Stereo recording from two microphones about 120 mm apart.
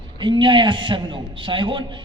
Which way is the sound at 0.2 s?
45° right (ahead or behind).